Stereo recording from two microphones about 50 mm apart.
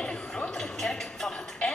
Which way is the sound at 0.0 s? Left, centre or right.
Centre.